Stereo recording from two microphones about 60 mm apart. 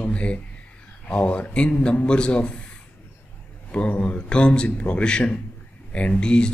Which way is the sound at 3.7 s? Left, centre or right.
Left.